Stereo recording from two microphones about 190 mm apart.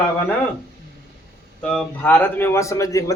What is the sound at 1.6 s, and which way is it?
A man's voice, 5° left (ahead or behind).